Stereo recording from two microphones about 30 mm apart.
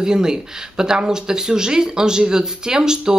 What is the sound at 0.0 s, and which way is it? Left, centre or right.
Speech, right.